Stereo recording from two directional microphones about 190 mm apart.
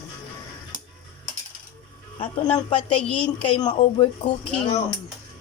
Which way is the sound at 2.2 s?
30° left (ahead or behind).